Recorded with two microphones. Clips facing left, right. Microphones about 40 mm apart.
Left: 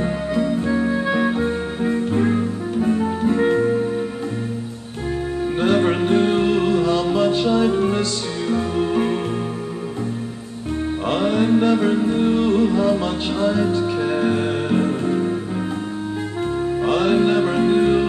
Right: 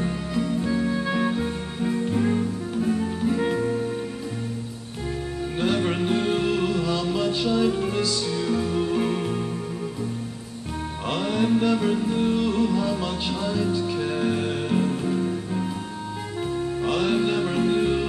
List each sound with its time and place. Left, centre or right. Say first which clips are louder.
0.0 s music: left 6 dB; centre
5.6 s music: left 6 dB; centre
11.1 s music: left 5 dB; centre
16.8 s music: left 6 dB; centre